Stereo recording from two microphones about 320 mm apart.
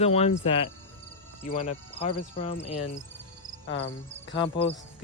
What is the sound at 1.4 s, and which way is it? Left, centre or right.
Speech, left.